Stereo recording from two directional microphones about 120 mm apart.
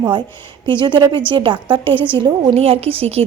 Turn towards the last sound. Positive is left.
turn(degrees=-55)  # may be behind; listen again after turning